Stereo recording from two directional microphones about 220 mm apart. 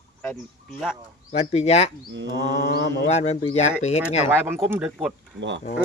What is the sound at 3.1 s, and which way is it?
Speech, 30° left (ahead or behind).